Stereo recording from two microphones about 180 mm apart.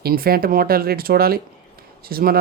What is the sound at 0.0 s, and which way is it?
Speech, 55° right (ahead or behind).